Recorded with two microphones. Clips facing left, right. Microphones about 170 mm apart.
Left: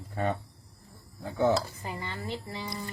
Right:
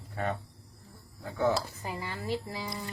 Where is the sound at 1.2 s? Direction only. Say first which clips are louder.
Left 3 dB; 25° left (ahead or behind).